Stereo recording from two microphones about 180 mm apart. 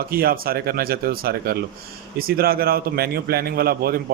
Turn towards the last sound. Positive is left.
turn(degrees=-55)  # may be behind; listen again after turning